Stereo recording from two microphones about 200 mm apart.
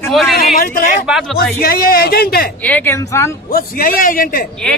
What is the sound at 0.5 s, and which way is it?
Speech, 45° left (ahead or behind).